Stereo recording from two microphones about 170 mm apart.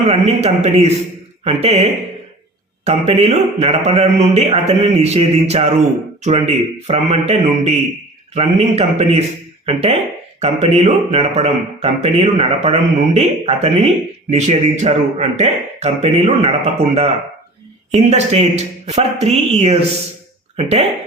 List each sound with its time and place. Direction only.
0.1 s speech: 40° right (ahead or behind)